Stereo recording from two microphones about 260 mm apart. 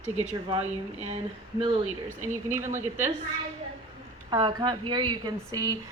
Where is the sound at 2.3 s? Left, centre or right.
Centre.